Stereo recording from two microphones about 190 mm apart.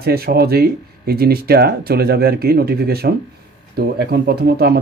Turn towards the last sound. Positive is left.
turn(degrees=-55)  # may be behind; listen again after turning